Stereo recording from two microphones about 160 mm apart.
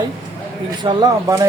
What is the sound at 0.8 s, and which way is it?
Speech, 25° right (ahead or behind).